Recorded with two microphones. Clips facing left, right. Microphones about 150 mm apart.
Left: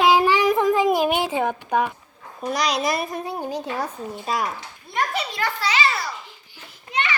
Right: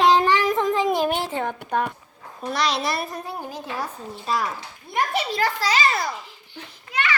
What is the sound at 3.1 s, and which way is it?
Speech, 20° left (ahead or behind).